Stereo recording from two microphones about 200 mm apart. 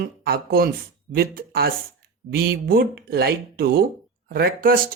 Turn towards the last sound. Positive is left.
turn(degrees=-45)  # may be behind; listen again after turning